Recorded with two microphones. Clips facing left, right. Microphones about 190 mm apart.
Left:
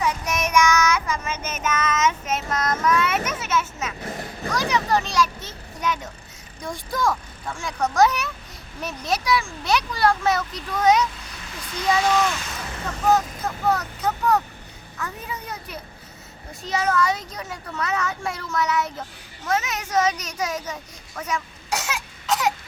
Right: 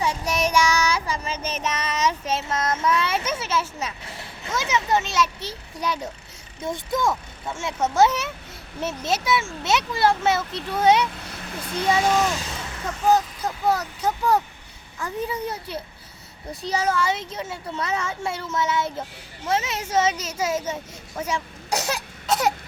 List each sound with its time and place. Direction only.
0.0 s child singing: 30° right (ahead or behind)
3.2 s a child's voice: 30° right (ahead or behind)
4.0 s a sound: 55° left (ahead or behind)
4.4 s speech: 20° right (ahead or behind)
6.6 s speech: 20° right (ahead or behind)
11.3 s vehicle: 60° right (ahead or behind)
11.7 s a child's voice: 30° right (ahead or behind)
13.7 s a child's voice: 30° right (ahead or behind)